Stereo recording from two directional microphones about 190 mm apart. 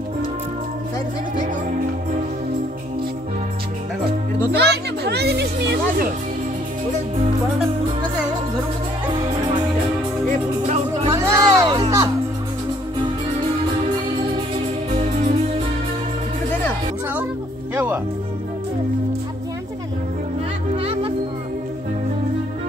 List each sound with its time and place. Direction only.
4.6 s music: 60° right (ahead or behind)
11.1 s music: 20° right (ahead or behind)
14.9 s music: 35° right (ahead or behind)
17.7 s speech: 10° right (ahead or behind)
20.7 s music: 30° right (ahead or behind)